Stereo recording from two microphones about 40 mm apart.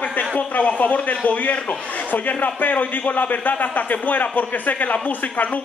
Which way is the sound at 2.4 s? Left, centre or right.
Left.